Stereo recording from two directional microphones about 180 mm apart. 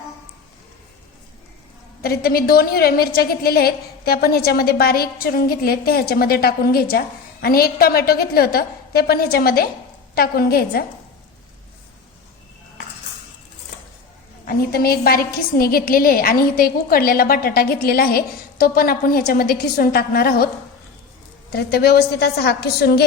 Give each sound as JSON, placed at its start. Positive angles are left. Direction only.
{"t": 2.0, "sound": "a woman's voice", "side_deg": 55}
{"t": 14.4, "sound": "a woman's voice", "side_deg": 55}
{"t": 21.5, "sound": "a woman's voice", "side_deg": 60}